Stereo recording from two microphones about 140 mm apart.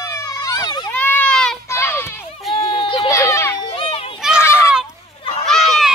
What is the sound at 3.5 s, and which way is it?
Children playing, 40° left (ahead or behind).